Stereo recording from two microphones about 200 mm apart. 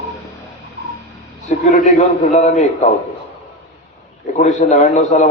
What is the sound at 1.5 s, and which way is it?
A man's voice, 35° left (ahead or behind).